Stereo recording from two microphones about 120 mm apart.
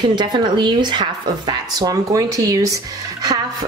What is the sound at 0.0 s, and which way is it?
Speech, 40° right (ahead or behind).